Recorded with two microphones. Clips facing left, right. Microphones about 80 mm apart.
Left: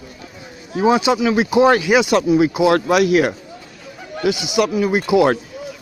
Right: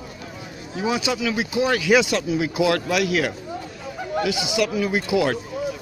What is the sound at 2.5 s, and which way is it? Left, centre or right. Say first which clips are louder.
Speech: left 6 dB; left.